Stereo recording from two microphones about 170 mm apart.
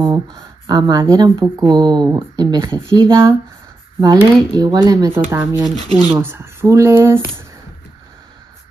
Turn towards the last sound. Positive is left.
turn(degrees=-15)  # may be behind; listen again after turning